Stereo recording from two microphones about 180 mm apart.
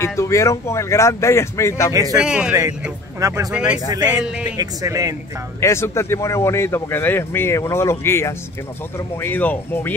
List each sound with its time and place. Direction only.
0.0 s speech: 15° left (ahead or behind)
2.1 s a man's voice: 5° right (ahead or behind)
3.2 s speech: 20° right (ahead or behind)
3.5 s a man's voice: 5° right (ahead or behind)
4.6 s speech: 20° right (ahead or behind)
5.6 s speech: 15° left (ahead or behind)